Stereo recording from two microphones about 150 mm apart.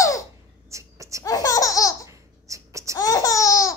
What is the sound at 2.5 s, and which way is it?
Baby cry, 20° right (ahead or behind).